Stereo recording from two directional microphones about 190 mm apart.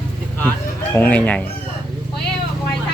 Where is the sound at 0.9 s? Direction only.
10° left (ahead or behind).